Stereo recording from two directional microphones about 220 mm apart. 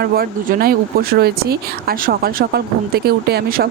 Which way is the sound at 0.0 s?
45° right (ahead or behind).